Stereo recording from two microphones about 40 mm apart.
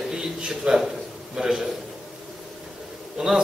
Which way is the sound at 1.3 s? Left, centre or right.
Centre.